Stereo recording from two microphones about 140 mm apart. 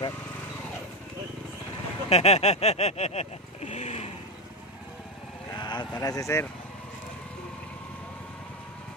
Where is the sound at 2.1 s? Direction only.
50° left (ahead or behind).